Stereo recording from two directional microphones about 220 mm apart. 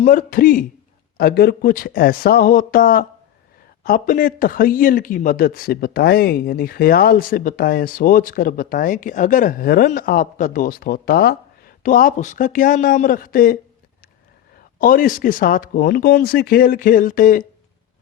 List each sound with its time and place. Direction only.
0.0 s a man's voice: 40° left (ahead or behind)
14.8 s a man's voice: 40° left (ahead or behind)